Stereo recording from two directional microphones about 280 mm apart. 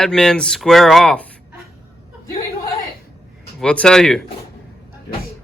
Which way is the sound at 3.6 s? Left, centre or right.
Centre.